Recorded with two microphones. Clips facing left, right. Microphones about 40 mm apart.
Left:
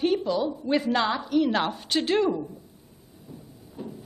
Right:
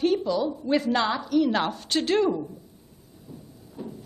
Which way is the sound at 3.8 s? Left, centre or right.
Centre.